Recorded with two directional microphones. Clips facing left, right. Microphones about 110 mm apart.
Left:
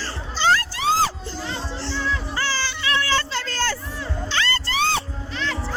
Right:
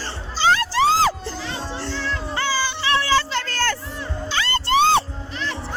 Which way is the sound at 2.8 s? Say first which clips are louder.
Right 2 dB; 30° right (ahead or behind).